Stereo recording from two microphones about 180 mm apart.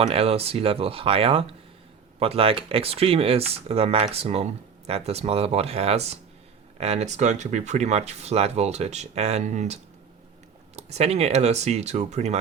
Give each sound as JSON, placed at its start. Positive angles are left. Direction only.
{"t": 0.0, "sound": "speech", "side_deg": -35}
{"t": 10.8, "sound": "speech", "side_deg": -35}